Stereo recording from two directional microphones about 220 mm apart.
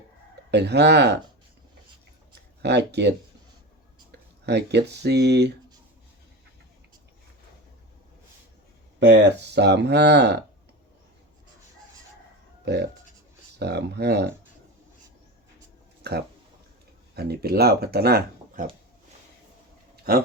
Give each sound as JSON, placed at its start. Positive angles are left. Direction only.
{"t": 0.5, "sound": "speech", "side_deg": -50}
{"t": 2.6, "sound": "speech", "side_deg": -50}
{"t": 4.4, "sound": "speech", "side_deg": -50}
{"t": 9.0, "sound": "speech", "side_deg": -55}
{"t": 12.6, "sound": "speech", "side_deg": -50}
{"t": 16.0, "sound": "speech", "side_deg": -50}
{"t": 20.1, "sound": "speech", "side_deg": -45}